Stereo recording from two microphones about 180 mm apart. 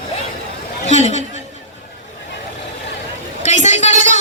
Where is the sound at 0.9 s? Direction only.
40° left (ahead or behind).